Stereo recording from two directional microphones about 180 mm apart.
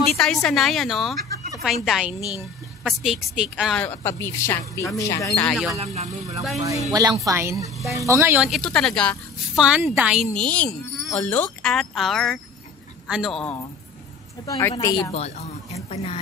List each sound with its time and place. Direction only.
0.0 s a woman's voice: centre (ahead or behind)
3.8 s speech: 10° left (ahead or behind)
5.5 s a woman's voice: centre (ahead or behind)
6.9 s a woman's voice: 20° right (ahead or behind)
8.5 s a woman's voice: 5° left (ahead or behind)
14.4 s a woman's voice: 20° left (ahead or behind)
15.1 s a woman's voice: 35° left (ahead or behind)